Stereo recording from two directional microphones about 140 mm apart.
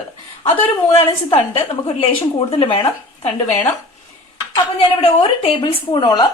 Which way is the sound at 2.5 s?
40° left (ahead or behind).